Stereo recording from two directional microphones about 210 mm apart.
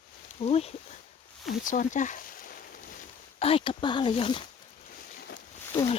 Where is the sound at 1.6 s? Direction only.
35° left (ahead or behind).